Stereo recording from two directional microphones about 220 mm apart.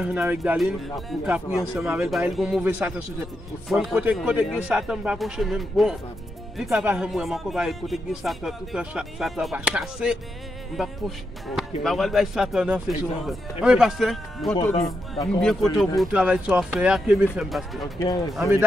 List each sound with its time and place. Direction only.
0.0 s speech: 10° right (ahead or behind)
17.9 s speech: 15° left (ahead or behind)